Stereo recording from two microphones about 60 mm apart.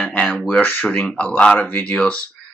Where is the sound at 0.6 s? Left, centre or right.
Left.